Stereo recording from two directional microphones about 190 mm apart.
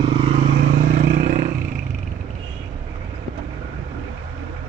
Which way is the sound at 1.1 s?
40° right (ahead or behind).